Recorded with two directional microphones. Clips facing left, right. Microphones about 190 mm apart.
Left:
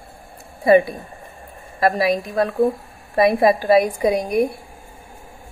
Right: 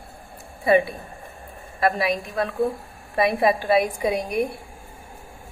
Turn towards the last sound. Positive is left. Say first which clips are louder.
# left 5 dB
turn(degrees=40)  # may be behind; listen again after turning